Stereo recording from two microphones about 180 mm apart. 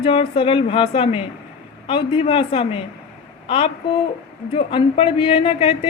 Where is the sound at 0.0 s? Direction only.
30° left (ahead or behind).